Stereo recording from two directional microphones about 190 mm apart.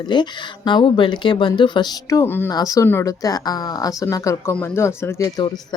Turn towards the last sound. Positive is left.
turn(degrees=20)  # may be behind; listen again after turning